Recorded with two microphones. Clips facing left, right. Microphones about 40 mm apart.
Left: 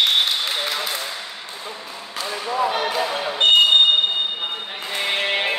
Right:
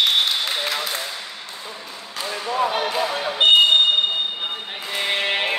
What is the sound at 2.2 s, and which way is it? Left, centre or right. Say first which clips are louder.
Basketball bounce: even; centre.